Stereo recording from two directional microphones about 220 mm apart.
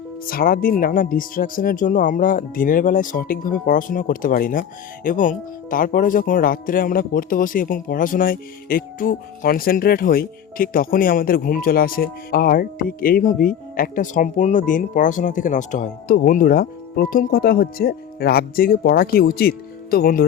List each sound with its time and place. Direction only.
0.3 s speech: 40° left (ahead or behind)